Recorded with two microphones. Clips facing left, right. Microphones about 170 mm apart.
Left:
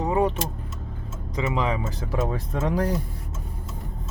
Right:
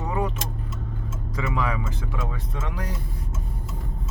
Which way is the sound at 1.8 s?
35° left (ahead or behind).